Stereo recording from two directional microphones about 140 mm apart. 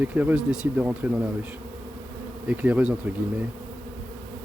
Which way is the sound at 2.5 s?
10° right (ahead or behind).